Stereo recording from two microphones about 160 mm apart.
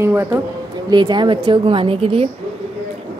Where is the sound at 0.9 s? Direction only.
30° right (ahead or behind).